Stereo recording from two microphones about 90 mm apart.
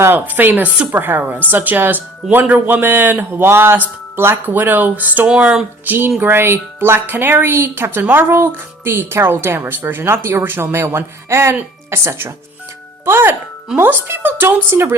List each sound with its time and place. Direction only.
0.0 s speech: 20° right (ahead or behind)
5.8 s speech: 20° right (ahead or behind)